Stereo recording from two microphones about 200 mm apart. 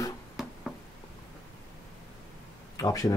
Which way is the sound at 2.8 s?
15° left (ahead or behind).